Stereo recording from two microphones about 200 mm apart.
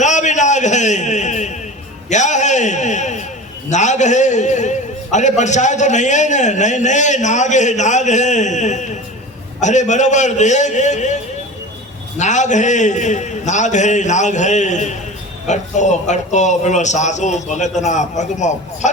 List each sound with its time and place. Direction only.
0.0 s a sound: 35° left (ahead or behind)
3.7 s a man's voice: 35° left (ahead or behind)
12.2 s a man's voice: 35° left (ahead or behind)